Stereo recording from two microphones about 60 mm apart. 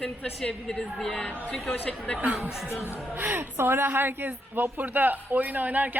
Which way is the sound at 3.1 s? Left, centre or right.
Right.